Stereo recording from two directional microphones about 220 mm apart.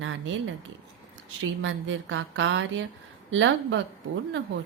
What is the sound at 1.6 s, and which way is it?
A woman's voice, 60° right (ahead or behind).